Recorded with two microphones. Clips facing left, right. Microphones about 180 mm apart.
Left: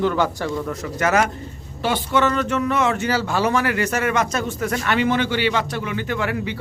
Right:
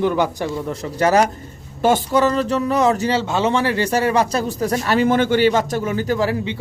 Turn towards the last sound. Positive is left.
turn(degrees=-30)  # may be behind; listen again after turning